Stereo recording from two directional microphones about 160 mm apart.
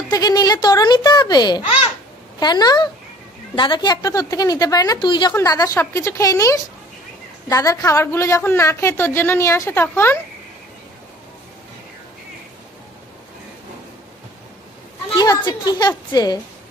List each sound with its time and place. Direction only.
0.1 s a woman's voice: 25° left (ahead or behind)
15.1 s a woman's voice: 25° left (ahead or behind)